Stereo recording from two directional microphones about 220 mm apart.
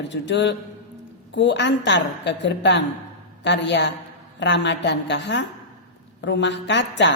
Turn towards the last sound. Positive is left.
turn(degrees=55)  # may be behind; listen again after turning